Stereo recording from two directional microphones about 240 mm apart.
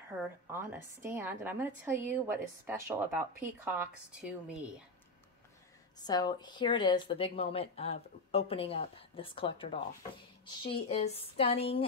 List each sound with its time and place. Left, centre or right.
0.5 s a woman's voice: centre
6.0 s speech: centre